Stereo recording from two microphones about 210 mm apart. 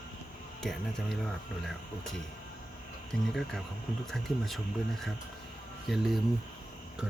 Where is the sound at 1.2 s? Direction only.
Centre (ahead or behind).